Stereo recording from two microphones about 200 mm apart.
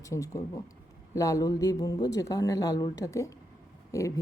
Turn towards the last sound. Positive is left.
turn(degrees=15)  # may be behind; listen again after turning